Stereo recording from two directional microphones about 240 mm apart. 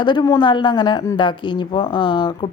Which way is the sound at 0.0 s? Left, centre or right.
Centre.